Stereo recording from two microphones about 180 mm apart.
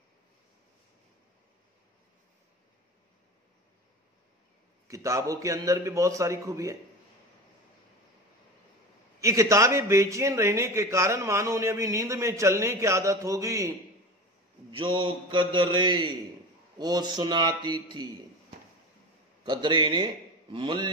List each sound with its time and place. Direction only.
4.8 s a man's voice: 15° right (ahead or behind)
9.2 s a man's voice: 15° right (ahead or behind)
14.7 s a man's voice: 30° right (ahead or behind)
19.4 s a man's voice: 25° right (ahead or behind)